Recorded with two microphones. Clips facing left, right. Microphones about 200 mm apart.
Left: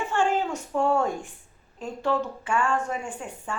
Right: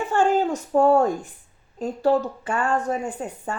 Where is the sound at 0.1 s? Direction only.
40° right (ahead or behind).